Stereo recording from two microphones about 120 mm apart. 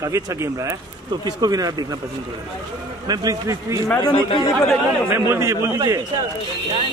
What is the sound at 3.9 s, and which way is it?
Speech, 40° left (ahead or behind).